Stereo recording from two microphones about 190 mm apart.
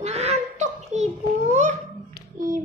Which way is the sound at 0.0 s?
35° right (ahead or behind).